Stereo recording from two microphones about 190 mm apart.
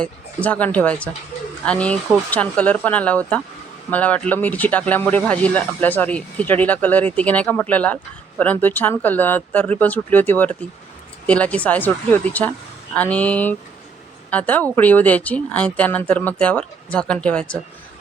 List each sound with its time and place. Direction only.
0.4 s speech: 10° left (ahead or behind)